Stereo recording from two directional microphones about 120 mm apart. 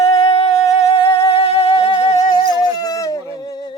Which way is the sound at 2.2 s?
35° left (ahead or behind).